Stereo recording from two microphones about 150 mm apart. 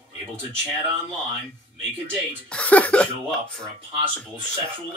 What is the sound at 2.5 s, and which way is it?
Speech, 10° left (ahead or behind).